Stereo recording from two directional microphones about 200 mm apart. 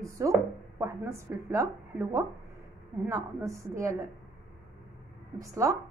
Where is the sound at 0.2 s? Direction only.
15° right (ahead or behind).